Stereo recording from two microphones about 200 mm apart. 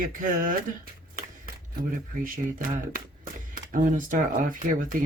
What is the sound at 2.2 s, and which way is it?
Speech, 45° right (ahead or behind).